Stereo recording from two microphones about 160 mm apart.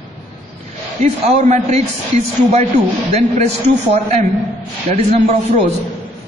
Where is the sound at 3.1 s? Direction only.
40° right (ahead or behind).